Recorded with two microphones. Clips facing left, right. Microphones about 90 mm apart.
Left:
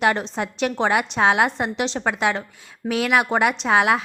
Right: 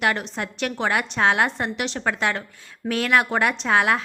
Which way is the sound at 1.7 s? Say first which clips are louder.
Left 2 dB; 25° left (ahead or behind).